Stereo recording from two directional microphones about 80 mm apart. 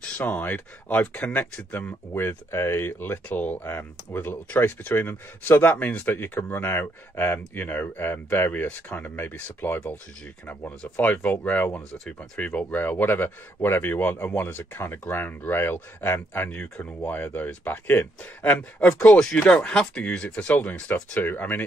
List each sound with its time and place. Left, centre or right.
0.2 s speech: left
18.9 s speech: left
19.3 s speech: centre